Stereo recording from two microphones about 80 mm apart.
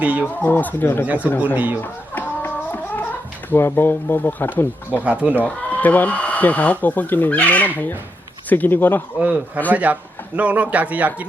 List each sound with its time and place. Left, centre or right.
0.0 s speech: centre
0.4 s speech: left
1.0 s a man's voice: centre
1.8 s a sound: left
5.0 s speech: centre
5.4 s speech: centre
9.1 s a man's voice: centre